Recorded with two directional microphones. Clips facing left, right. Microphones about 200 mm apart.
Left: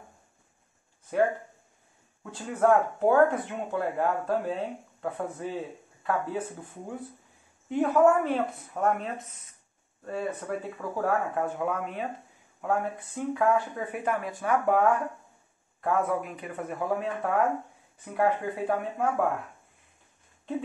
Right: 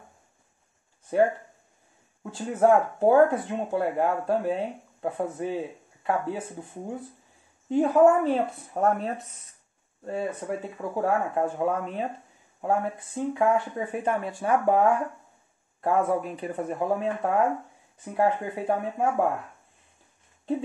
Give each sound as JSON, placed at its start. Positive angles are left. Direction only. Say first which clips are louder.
{"t": 2.3, "sound": "speech", "louder": "right 2 dB", "side_deg": -30}